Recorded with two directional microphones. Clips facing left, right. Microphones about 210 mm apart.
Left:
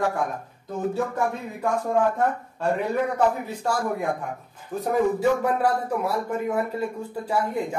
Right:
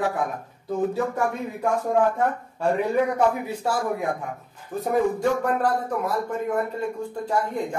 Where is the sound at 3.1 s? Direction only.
5° right (ahead or behind).